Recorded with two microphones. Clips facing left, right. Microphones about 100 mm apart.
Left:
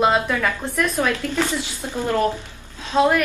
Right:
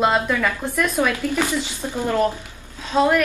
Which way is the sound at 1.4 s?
10° right (ahead or behind).